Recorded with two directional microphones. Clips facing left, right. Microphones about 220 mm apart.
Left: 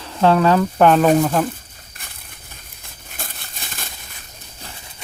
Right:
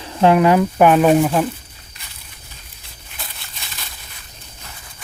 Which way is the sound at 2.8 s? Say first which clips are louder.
Left 3 dB; 50° left (ahead or behind).